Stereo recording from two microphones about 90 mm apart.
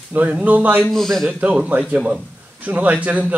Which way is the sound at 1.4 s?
15° right (ahead or behind).